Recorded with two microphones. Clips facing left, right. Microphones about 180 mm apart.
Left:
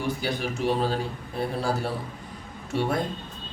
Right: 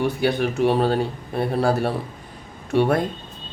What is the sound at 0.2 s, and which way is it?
Speech, 60° right (ahead or behind).